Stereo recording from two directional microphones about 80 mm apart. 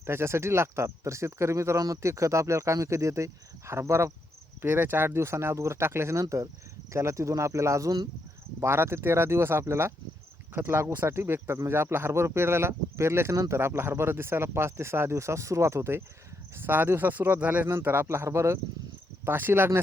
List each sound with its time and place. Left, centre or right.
0.0 s speech: right
4.6 s speech: right